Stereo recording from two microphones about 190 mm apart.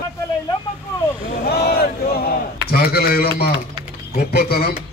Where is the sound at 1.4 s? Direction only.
55° left (ahead or behind).